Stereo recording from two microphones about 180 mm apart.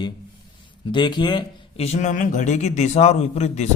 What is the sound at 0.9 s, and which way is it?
A man's voice, 25° left (ahead or behind).